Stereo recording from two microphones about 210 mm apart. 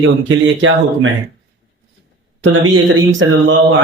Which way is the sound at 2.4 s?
65° right (ahead or behind).